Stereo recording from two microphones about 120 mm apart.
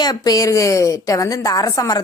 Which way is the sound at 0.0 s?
35° left (ahead or behind).